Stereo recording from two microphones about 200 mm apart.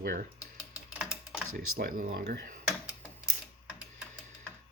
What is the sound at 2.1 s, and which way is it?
Speech, 55° right (ahead or behind).